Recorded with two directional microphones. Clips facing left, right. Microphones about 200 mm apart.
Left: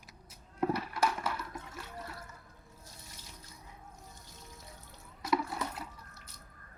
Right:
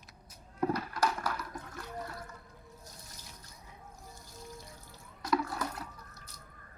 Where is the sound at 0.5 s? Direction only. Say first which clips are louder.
Even; 5° left (ahead or behind).